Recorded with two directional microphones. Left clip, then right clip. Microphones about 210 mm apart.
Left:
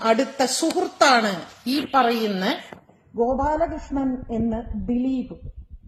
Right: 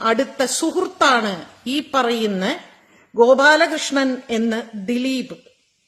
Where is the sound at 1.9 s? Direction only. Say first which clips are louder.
Right 1 dB; 30° right (ahead or behind).